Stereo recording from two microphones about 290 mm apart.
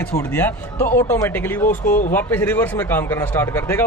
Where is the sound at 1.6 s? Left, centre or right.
Left.